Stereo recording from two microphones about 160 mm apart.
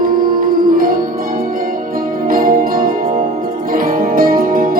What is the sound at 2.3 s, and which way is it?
Music, 60° right (ahead or behind).